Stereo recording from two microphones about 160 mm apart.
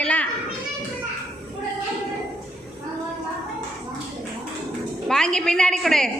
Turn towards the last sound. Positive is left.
turn(degrees=5)  # may be behind; listen again after turning